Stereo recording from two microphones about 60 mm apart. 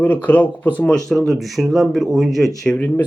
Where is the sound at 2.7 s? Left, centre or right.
Left.